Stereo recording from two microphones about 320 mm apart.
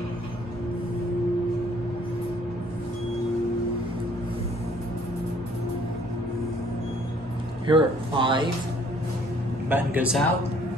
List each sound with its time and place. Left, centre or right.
7.6 s speech: centre
9.7 s a man's voice: centre